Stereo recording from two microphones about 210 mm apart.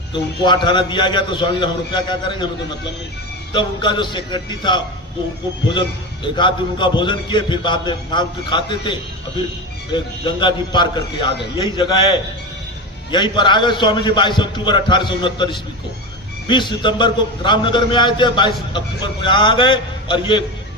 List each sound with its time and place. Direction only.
0.1 s a man's voice: 20° left (ahead or behind)
3.5 s a man's voice: 20° left (ahead or behind)
6.2 s a man's voice: 20° left (ahead or behind)
13.1 s a man's voice: 20° left (ahead or behind)